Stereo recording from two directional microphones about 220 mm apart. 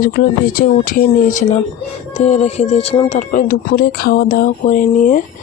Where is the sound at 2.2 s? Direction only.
30° left (ahead or behind).